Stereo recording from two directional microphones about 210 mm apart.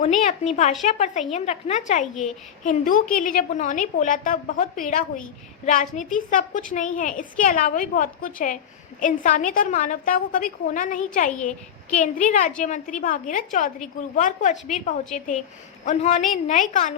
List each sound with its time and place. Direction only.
0.2 s a child's voice: 35° left (ahead or behind)